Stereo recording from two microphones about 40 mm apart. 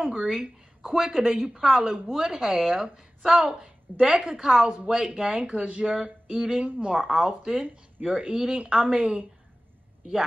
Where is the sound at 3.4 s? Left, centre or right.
Right.